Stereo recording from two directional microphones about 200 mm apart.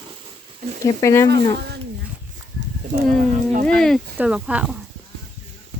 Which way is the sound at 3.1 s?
40° right (ahead or behind).